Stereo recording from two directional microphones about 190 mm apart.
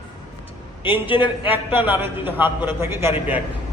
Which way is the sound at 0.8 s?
25° left (ahead or behind).